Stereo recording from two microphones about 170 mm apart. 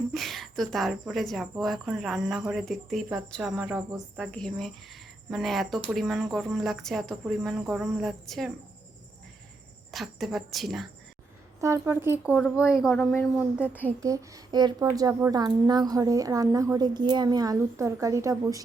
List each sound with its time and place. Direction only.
0.1 s a woman's voice: centre (ahead or behind)
9.9 s a woman's voice: centre (ahead or behind)
11.6 s speech: 15° right (ahead or behind)
12.5 s speech: 15° left (ahead or behind)
14.0 s a child's voice: 20° right (ahead or behind)